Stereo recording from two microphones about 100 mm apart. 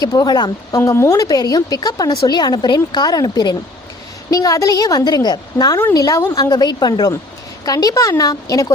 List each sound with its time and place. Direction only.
0.0 s a woman's voice: 40° left (ahead or behind)
0.8 s a woman's voice: 30° left (ahead or behind)